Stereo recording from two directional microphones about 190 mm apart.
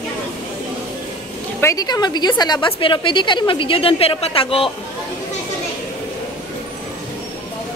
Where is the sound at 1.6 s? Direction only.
20° left (ahead or behind).